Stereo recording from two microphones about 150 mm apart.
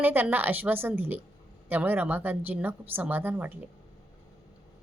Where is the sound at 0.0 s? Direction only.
15° right (ahead or behind).